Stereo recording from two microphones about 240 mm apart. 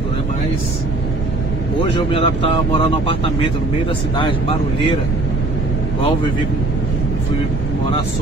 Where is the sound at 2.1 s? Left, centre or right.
Left.